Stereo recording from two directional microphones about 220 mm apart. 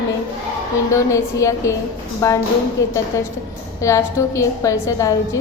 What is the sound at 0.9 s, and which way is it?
A woman's voice, 15° left (ahead or behind).